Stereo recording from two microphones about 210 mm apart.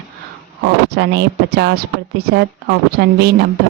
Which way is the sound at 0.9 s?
50° right (ahead or behind).